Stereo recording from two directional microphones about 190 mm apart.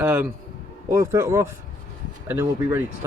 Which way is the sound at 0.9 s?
15° right (ahead or behind).